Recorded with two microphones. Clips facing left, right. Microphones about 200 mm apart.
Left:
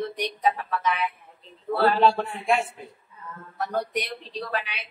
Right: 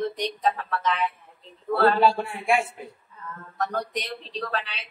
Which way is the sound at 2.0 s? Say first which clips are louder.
Even; 10° right (ahead or behind).